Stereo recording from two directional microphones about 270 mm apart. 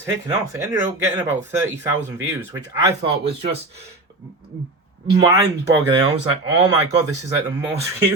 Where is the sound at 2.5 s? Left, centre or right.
Centre.